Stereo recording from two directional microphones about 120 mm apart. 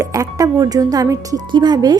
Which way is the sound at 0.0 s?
30° right (ahead or behind).